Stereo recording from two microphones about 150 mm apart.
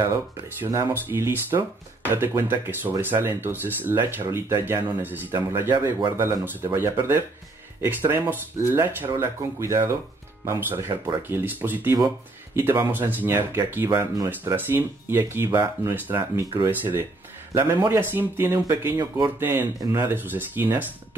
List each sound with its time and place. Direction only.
0.0 s speech: 20° right (ahead or behind)
17.6 s speech: 15° right (ahead or behind)
19.4 s speech: 15° right (ahead or behind)